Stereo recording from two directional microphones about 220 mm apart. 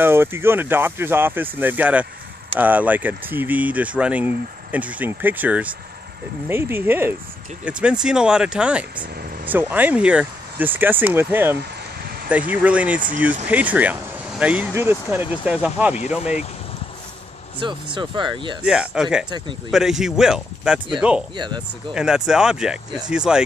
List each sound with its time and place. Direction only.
0.0 s speech: 10° right (ahead or behind)
17.6 s speech: 20° right (ahead or behind)
18.6 s speech: 5° right (ahead or behind)
21.4 s speech: 20° right (ahead or behind)
21.9 s speech: 5° right (ahead or behind)